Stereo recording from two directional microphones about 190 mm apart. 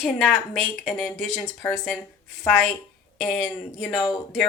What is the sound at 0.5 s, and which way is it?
Speech, centre (ahead or behind).